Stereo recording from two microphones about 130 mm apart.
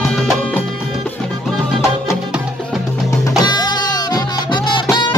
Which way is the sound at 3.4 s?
35° left (ahead or behind).